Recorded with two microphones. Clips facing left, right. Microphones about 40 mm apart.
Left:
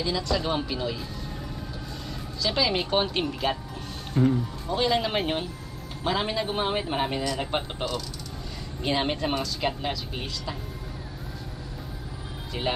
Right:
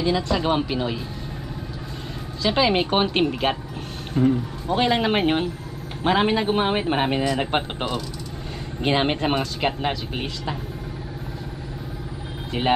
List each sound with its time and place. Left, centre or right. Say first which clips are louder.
0.0 s speech: right 5 dB; right
2.4 s a man's voice: right 6 dB; right
4.6 s a man's voice: right 5 dB; right